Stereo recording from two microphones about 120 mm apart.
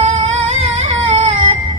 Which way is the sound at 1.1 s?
65° right (ahead or behind).